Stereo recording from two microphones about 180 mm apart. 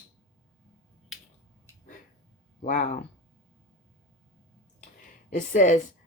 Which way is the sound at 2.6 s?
45° left (ahead or behind).